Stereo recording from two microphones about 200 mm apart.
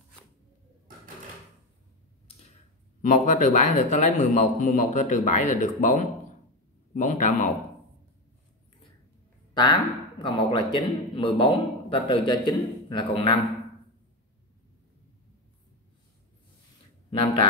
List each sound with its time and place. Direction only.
3.0 s a man's voice: 40° left (ahead or behind)
9.5 s a man's voice: 20° left (ahead or behind)
17.1 s speech: 25° left (ahead or behind)